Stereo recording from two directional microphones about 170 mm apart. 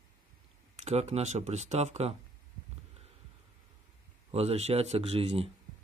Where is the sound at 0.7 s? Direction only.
40° right (ahead or behind).